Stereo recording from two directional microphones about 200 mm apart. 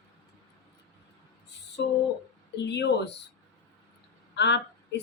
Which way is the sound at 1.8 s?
55° left (ahead or behind).